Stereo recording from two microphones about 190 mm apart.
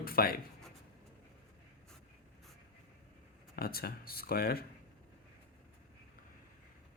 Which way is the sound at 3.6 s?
50° left (ahead or behind).